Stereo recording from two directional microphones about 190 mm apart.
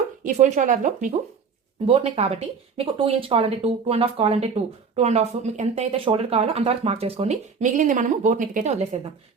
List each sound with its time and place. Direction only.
0.3 s speech: 40° right (ahead or behind)
1.9 s speech: 30° right (ahead or behind)